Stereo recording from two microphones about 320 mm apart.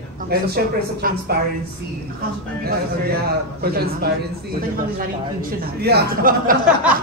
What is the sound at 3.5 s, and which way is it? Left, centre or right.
A man's voice, right.